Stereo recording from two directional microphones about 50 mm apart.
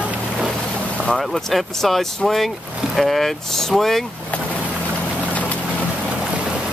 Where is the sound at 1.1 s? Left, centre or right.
Centre.